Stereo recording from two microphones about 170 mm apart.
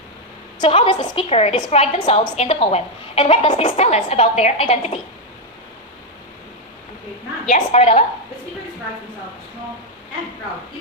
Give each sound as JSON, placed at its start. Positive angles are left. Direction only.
{"t": 0.6, "sound": "a woman's voice", "side_deg": 30}
{"t": 7.4, "sound": "a woman's voice", "side_deg": 40}